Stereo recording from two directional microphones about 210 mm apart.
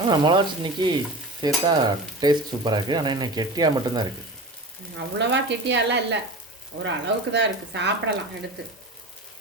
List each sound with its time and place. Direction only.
0.1 s stir: 20° right (ahead or behind)
4.9 s speech: 55° right (ahead or behind)